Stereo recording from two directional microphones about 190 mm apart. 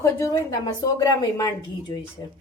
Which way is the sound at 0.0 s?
20° left (ahead or behind).